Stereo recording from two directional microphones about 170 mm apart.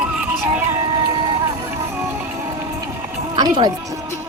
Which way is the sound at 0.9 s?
25° right (ahead or behind).